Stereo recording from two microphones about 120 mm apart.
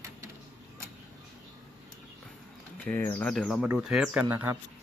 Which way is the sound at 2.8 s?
20° left (ahead or behind).